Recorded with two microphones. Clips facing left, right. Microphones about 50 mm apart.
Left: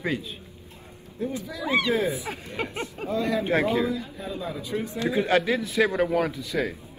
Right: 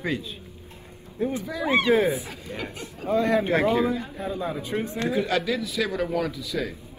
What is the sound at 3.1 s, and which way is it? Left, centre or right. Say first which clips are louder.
A man's voice: right 3 dB; right.